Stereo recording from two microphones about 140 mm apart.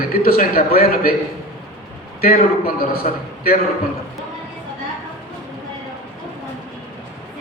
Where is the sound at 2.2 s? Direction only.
90° left.